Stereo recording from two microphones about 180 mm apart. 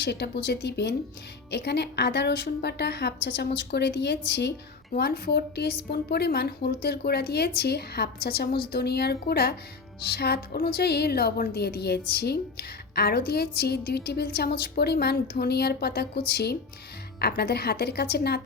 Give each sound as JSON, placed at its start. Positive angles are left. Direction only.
{"t": 0.0, "sound": "a woman's voice", "side_deg": 70}